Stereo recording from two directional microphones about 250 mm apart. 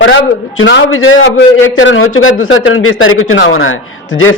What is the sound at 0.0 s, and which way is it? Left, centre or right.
A man's voice, left.